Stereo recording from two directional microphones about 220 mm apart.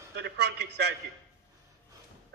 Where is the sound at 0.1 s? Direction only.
50° right (ahead or behind).